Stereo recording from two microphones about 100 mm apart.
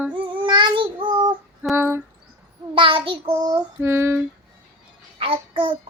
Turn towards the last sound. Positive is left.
turn(degrees=-65)  # may be behind; listen again after turning